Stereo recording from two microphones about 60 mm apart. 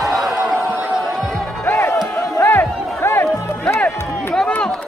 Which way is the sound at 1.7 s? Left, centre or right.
Left.